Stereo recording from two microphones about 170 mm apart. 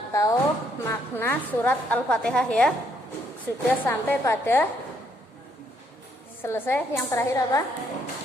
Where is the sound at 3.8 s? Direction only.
15° left (ahead or behind).